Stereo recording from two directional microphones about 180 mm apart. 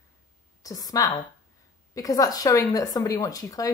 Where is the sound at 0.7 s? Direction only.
20° left (ahead or behind).